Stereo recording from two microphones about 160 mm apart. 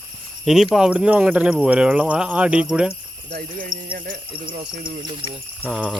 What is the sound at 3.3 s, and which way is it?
Speech, 60° right (ahead or behind).